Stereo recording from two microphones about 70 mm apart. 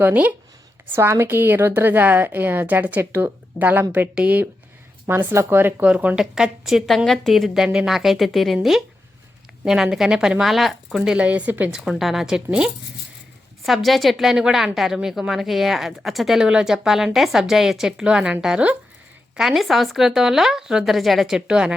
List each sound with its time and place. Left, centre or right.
0.0 s a woman's voice: right
0.9 s a woman's voice: right; by 4.4 s centre
5.0 s a woman's voice: right
6.1 s a woman's voice: centre
9.6 s speech: centre; by 11.7 s right
11.7 s speech: centre
13.7 s a woman's voice: centre
19.4 s a woman's voice: centre